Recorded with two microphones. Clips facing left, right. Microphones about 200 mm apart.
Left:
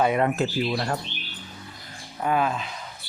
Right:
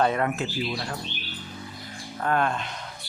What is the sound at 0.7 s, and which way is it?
Speech, 55° left (ahead or behind).